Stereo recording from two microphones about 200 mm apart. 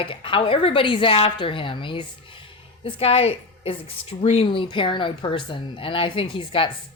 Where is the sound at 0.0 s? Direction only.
25° left (ahead or behind).